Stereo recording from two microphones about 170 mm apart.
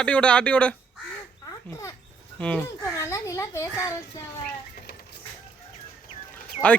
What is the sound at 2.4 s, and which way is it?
A man's voice, 10° left (ahead or behind).